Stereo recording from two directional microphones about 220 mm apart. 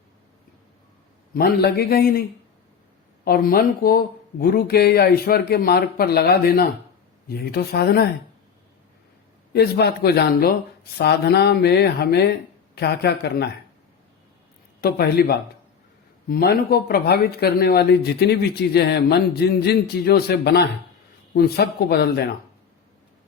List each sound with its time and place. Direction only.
1.3 s speech: 45° left (ahead or behind)
3.2 s speech: 40° left (ahead or behind)
9.5 s speech: 45° left (ahead or behind)
14.8 s speech: 45° left (ahead or behind)